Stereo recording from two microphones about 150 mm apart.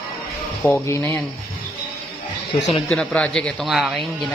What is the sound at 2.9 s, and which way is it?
A man's voice, 5° left (ahead or behind).